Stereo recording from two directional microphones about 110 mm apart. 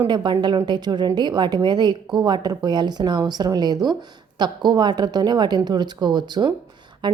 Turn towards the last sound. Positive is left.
turn(degrees=-45)  # may be behind; listen again after turning